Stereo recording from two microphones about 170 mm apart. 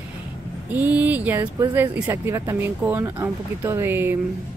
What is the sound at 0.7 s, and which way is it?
Speech, 10° right (ahead or behind).